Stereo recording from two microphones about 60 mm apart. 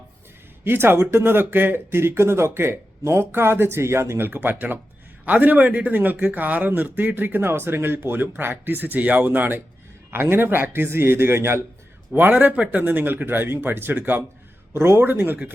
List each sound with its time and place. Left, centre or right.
0.6 s a man's voice: right
4.4 s a man's voice: right
12.4 s a man's voice: right